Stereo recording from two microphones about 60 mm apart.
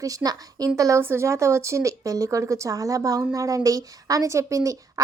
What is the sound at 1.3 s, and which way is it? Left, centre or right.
Speech, right.